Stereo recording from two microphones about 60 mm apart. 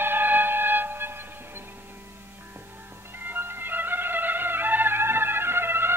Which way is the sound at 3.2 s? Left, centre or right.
Right.